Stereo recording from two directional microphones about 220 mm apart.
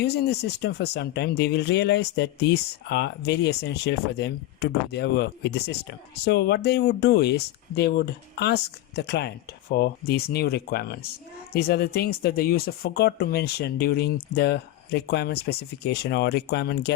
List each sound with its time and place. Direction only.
0.0 s speech: 50° left (ahead or behind)